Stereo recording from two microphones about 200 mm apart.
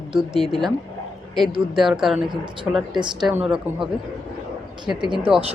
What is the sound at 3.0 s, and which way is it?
Speech, 20° right (ahead or behind).